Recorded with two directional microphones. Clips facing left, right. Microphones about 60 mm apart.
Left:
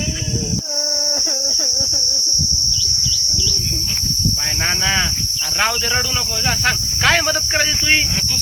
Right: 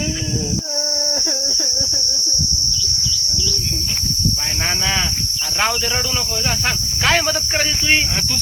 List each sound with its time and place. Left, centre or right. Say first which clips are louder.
4.6 s speech: left 2 dB; centre
6.7 s speech: left 2 dB; left